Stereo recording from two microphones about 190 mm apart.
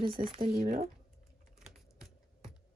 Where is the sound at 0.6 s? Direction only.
40° right (ahead or behind).